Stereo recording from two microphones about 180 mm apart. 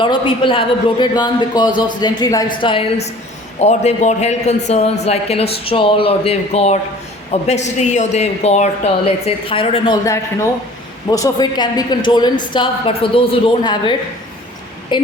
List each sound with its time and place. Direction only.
0.0 s a man's voice: 25° left (ahead or behind)